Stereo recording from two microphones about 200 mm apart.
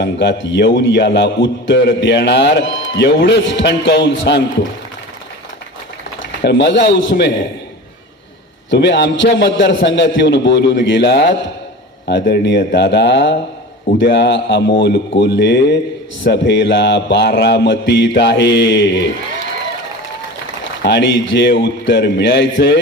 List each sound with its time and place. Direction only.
0.0 s a man's voice: 60° left (ahead or behind)
6.4 s a man's voice: 60° left (ahead or behind)
8.7 s a man's voice: 60° left (ahead or behind)
20.8 s a man's voice: 60° left (ahead or behind)